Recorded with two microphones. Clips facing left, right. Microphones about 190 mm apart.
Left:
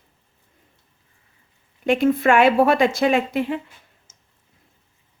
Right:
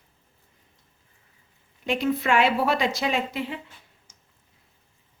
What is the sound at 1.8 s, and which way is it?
A woman's voice, 50° left (ahead or behind).